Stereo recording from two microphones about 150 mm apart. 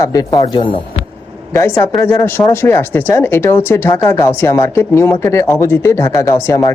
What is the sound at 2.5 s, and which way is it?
Speech, 15° left (ahead or behind).